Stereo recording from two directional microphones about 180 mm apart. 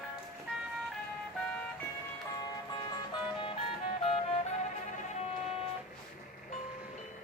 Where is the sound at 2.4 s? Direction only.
25° left (ahead or behind).